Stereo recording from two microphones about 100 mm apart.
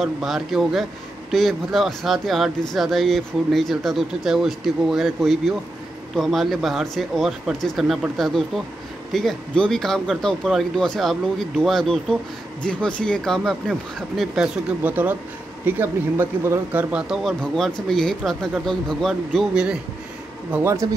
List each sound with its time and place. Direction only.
0.0 s speech: centre (ahead or behind)
14.8 s speech: 15° right (ahead or behind)
16.9 s speech: 5° right (ahead or behind)
17.4 s speech: 10° left (ahead or behind)
19.5 s speech: 10° right (ahead or behind)
20.5 s speech: 30° right (ahead or behind)